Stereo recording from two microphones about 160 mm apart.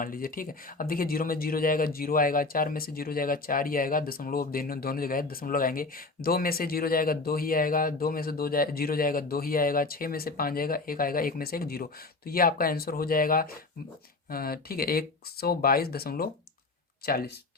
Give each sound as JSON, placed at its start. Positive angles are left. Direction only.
{"t": 0.0, "sound": "speech", "side_deg": 60}